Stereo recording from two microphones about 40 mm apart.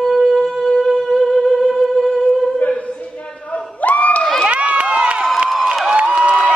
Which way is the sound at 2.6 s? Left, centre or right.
Left.